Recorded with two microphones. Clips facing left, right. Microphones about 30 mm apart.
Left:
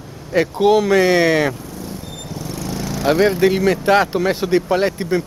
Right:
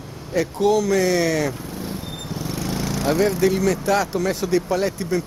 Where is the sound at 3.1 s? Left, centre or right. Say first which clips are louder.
Left 5 dB; left.